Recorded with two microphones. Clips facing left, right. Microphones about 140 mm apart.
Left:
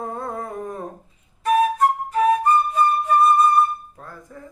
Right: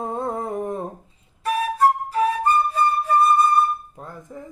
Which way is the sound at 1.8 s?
35° right (ahead or behind).